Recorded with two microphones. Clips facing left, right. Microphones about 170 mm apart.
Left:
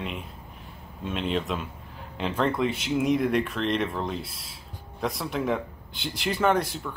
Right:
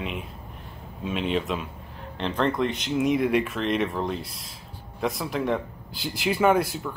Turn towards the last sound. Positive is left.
turn(degrees=-5)  # may be behind; listen again after turning